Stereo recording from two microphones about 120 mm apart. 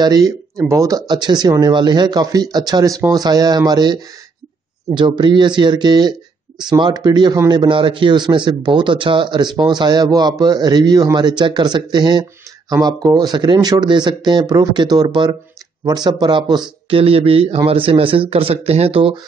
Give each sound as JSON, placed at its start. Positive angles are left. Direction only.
{"t": 0.0, "sound": "a man's voice", "side_deg": -35}
{"t": 17.0, "sound": "a man's voice", "side_deg": -50}